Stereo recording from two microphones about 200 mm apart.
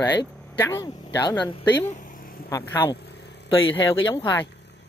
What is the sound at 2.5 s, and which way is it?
Speech, 15° left (ahead or behind).